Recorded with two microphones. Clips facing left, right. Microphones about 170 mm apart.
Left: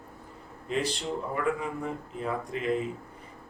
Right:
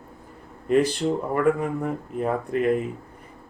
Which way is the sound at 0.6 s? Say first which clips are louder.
Right 10 dB; 55° right (ahead or behind).